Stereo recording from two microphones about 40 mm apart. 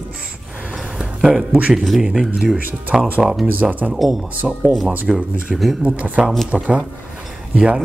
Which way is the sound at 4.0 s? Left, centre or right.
Centre.